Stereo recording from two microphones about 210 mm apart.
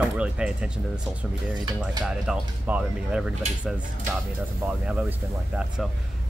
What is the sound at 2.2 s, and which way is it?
Speech, 5° right (ahead or behind).